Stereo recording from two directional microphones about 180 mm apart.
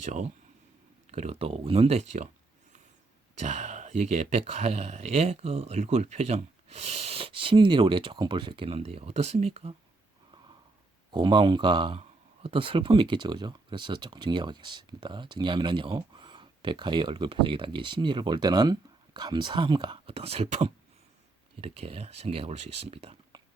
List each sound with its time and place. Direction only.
0.0 s speech: 40° right (ahead or behind)
3.3 s speech: 40° right (ahead or behind)
11.1 s speech: 25° right (ahead or behind)